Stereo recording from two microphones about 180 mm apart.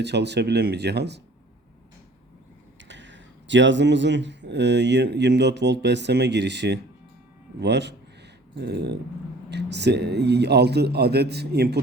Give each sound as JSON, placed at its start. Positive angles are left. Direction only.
{"t": 0.0, "sound": "speech", "side_deg": -70}
{"t": 2.8, "sound": "speech", "side_deg": -85}